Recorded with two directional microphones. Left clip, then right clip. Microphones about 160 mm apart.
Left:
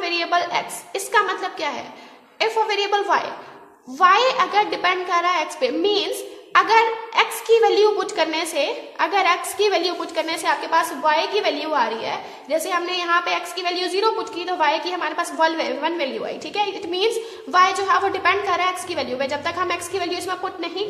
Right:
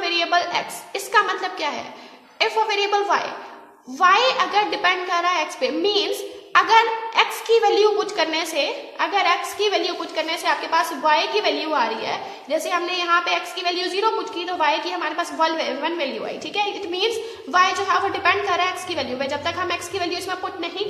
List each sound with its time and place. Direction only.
0.0 s a woman's voice: 20° left (ahead or behind)